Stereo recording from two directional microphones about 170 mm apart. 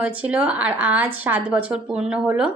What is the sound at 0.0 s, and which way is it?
Speech, 10° right (ahead or behind).